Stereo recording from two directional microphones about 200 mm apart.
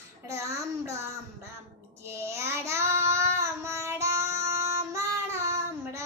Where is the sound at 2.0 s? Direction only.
15° right (ahead or behind).